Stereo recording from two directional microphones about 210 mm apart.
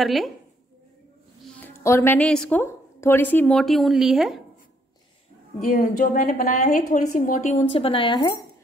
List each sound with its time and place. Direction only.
0.0 s speech: centre (ahead or behind)
1.6 s a woman's voice: 10° left (ahead or behind)
5.6 s a woman's voice: 40° left (ahead or behind)
7.7 s a woman's voice: 25° left (ahead or behind)